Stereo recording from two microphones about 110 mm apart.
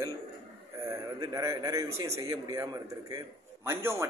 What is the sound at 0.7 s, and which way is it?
A man's voice, 25° right (ahead or behind).